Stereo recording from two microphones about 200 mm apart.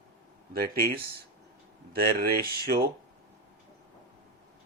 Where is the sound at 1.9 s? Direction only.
50° right (ahead or behind).